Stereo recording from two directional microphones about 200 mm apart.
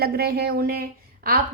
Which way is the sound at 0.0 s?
50° right (ahead or behind).